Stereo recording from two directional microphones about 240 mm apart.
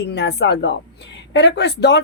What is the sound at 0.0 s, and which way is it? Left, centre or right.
Speech, left.